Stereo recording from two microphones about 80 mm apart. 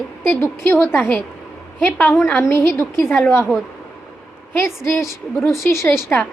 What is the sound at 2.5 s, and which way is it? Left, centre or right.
Speech, left.